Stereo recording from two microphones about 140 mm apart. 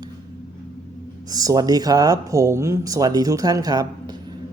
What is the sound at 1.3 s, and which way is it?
A man's voice, 25° right (ahead or behind).